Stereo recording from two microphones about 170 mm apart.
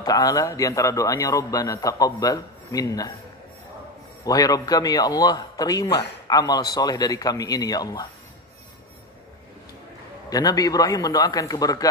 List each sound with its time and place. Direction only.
0.0 s a man's voice: 20° left (ahead or behind)
4.2 s a man's voice: 20° left (ahead or behind)
10.3 s a man's voice: 20° left (ahead or behind)